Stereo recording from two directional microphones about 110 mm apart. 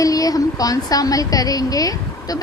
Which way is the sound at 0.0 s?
35° left (ahead or behind).